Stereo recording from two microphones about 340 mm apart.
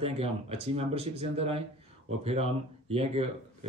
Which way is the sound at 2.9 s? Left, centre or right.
Centre.